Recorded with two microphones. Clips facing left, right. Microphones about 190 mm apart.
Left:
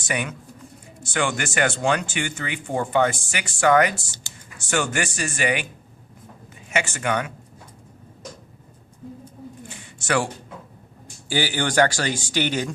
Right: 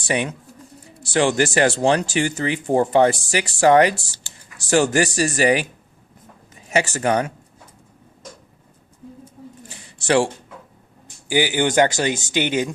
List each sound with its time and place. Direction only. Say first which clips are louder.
0.0 s speech: right 5 dB; 30° right (ahead or behind)
6.7 s speech: right 5 dB; 40° right (ahead or behind)
9.6 s a sound: right 6 dB; 35° right (ahead or behind)
11.3 s speech: right 5 dB; 15° right (ahead or behind)